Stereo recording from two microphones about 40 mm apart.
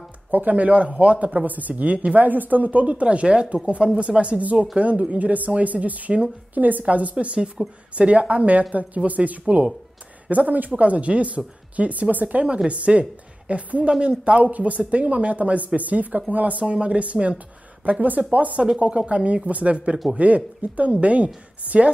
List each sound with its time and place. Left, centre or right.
0.3 s speech: right
4.4 s speech: right
20.2 s speech: right